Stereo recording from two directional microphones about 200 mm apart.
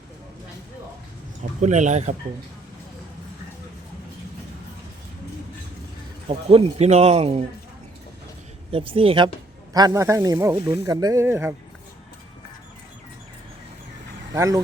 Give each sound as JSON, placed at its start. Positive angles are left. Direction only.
{"t": 1.6, "sound": "speech", "side_deg": -35}
{"t": 6.2, "sound": "speech", "side_deg": -30}
{"t": 8.7, "sound": "speech", "side_deg": -25}
{"t": 14.3, "sound": "speech", "side_deg": -15}